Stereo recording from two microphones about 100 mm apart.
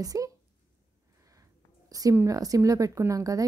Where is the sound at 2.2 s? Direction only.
35° right (ahead or behind).